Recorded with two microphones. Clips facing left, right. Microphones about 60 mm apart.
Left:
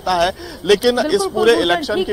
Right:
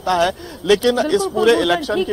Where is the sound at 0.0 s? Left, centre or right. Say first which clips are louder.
Even; centre.